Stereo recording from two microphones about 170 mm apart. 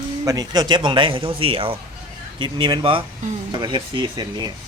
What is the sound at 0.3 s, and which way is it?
Speech, 20° right (ahead or behind).